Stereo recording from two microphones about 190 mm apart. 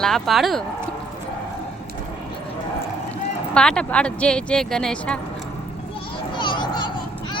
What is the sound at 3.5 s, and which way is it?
Speech, 5° left (ahead or behind).